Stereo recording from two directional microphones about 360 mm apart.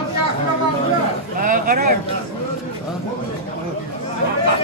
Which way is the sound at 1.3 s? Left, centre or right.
Right.